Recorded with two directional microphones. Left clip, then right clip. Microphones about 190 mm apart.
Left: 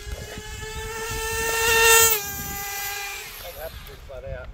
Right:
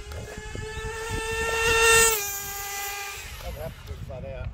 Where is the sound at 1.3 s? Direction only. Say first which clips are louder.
Left 2 dB; 15° left (ahead or behind).